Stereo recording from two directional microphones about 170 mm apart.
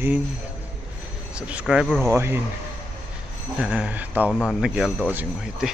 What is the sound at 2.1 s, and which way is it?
Speech, 15° right (ahead or behind).